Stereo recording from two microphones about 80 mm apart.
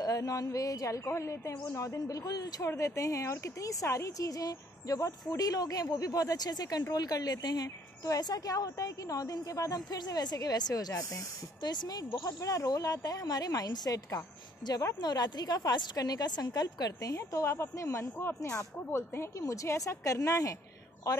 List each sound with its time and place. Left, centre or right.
0.0 s a woman's voice: left
2.6 s a woman's voice: left
11.7 s a woman's voice: left
15.0 s a woman's voice: left
17.1 s a woman's voice: left